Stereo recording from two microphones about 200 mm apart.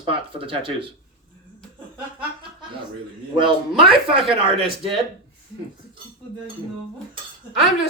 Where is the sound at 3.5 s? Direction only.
25° right (ahead or behind).